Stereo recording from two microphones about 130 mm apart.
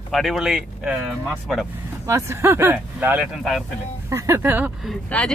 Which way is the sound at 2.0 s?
20° right (ahead or behind).